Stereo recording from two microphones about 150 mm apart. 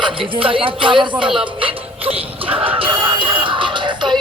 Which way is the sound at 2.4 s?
40° right (ahead or behind).